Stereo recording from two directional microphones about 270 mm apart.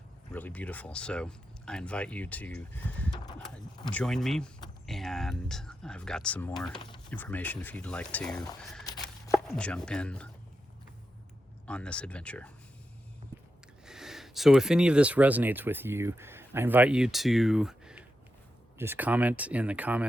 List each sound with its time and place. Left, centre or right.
0.3 s speech: centre
6.7 s speech: centre
7.1 s speech: centre
11.6 s speech: centre
13.8 s speech: centre